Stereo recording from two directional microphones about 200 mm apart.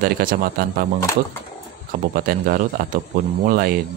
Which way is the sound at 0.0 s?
45° right (ahead or behind).